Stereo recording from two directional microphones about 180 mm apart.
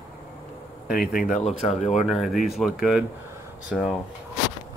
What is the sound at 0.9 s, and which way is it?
Speech, 55° left (ahead or behind).